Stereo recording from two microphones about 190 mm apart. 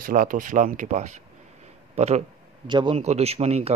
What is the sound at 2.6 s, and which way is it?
A man's voice, 25° right (ahead or behind).